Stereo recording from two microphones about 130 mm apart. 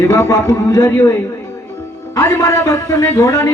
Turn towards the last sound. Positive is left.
turn(degrees=30)  # may be behind; listen again after turning